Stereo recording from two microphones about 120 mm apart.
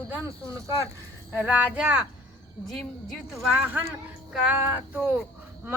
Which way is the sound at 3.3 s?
20° right (ahead or behind).